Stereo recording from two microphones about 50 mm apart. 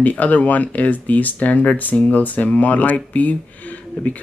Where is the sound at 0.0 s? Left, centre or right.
Left.